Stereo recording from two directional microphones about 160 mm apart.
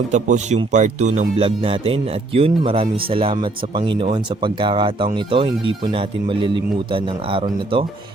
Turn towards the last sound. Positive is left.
turn(degrees=-30)  # may be behind; listen again after turning